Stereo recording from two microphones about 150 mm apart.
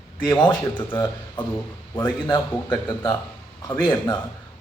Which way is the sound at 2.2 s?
30° left (ahead or behind).